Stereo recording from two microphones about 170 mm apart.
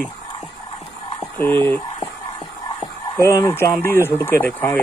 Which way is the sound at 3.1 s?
20° left (ahead or behind).